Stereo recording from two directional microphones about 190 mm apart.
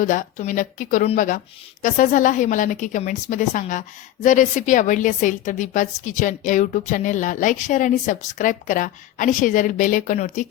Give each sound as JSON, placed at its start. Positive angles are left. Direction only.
{"t": 0.0, "sound": "a woman's voice", "side_deg": 40}